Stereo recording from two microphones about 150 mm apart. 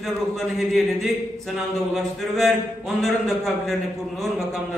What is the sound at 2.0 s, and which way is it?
A man's voice, centre (ahead or behind).